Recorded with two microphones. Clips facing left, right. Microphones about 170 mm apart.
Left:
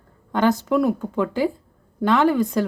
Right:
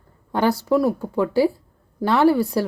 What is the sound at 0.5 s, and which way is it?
Speech, 35° right (ahead or behind).